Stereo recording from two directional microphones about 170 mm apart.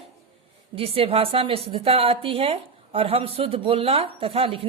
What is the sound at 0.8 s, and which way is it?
A woman's voice, 35° right (ahead or behind).